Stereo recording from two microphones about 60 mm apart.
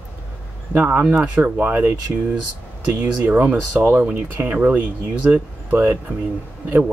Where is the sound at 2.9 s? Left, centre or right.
Right.